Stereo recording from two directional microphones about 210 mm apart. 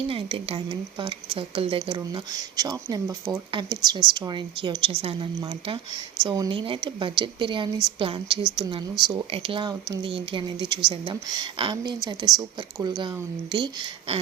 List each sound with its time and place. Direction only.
0.1 s a woman's voice: 25° right (ahead or behind)